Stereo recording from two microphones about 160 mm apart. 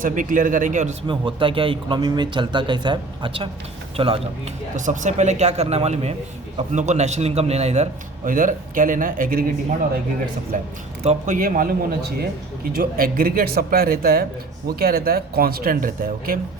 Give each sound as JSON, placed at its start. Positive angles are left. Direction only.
{"t": 0.0, "sound": "speech", "side_deg": -55}
{"t": 1.0, "sound": "speech", "side_deg": -30}
{"t": 4.9, "sound": "a man's voice", "side_deg": -50}
{"t": 8.3, "sound": "speech", "side_deg": -55}
{"t": 10.5, "sound": "speech", "side_deg": -55}
{"t": 11.0, "sound": "a man's voice", "side_deg": -45}
{"t": 11.3, "sound": "speech", "side_deg": -60}